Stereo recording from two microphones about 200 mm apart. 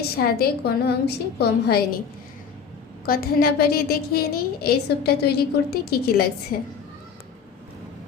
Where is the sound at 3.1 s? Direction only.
50° left (ahead or behind).